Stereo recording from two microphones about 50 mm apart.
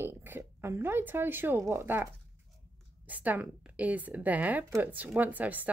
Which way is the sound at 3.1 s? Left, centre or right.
Right.